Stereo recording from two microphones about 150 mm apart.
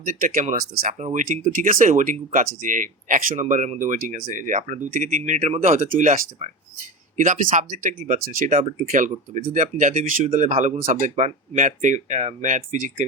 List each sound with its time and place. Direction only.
0.0 s speech: 60° right (ahead or behind)
3.4 s speech: 50° right (ahead or behind)
8.9 s speech: 60° right (ahead or behind)
10.2 s speech: 50° right (ahead or behind)